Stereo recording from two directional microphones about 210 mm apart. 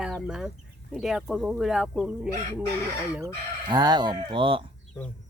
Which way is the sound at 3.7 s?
20° right (ahead or behind).